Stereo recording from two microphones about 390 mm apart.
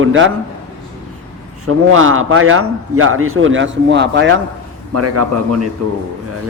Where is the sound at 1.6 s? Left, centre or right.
Right.